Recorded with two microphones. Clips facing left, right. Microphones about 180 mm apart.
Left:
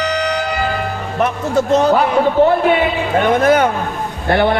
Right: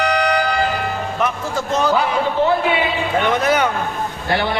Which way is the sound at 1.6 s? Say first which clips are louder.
Left 6 dB; 65° left (ahead or behind).